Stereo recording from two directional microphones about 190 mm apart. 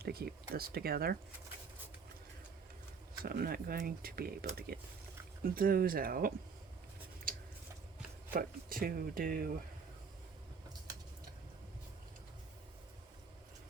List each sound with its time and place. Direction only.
0.0 s speech: 55° right (ahead or behind)
3.2 s speech: 50° right (ahead or behind)
8.3 s speech: 50° right (ahead or behind)